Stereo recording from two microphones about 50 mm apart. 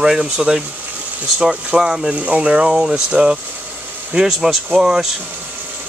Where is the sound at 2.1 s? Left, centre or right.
Right.